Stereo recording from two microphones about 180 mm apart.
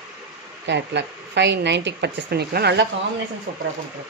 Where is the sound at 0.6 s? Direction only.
75° right (ahead or behind).